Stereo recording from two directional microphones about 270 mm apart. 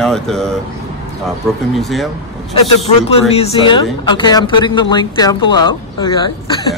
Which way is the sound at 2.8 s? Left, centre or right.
Left.